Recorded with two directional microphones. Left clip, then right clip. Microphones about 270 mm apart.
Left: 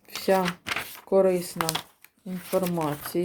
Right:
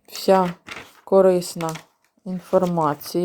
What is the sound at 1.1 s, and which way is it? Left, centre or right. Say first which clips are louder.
Speech: right 6 dB; right.